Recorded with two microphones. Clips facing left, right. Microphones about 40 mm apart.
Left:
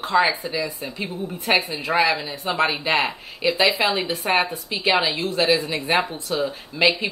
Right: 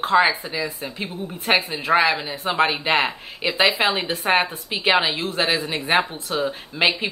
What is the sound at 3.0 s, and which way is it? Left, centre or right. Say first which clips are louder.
A woman's voice: right 1 dB; right.